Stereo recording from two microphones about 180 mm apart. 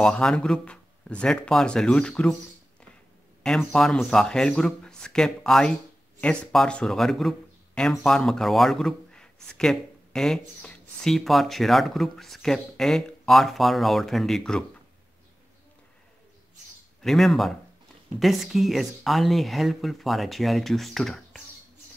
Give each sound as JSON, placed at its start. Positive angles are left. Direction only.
{"t": 0.0, "sound": "speech", "side_deg": 5}
{"t": 3.4, "sound": "speech", "side_deg": 5}
{"t": 17.0, "sound": "speech", "side_deg": 0}